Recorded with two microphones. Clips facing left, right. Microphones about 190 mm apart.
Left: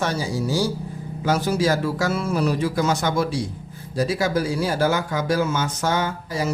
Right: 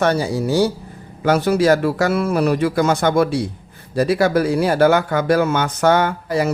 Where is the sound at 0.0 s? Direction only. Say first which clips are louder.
Right 6 dB; 65° right (ahead or behind).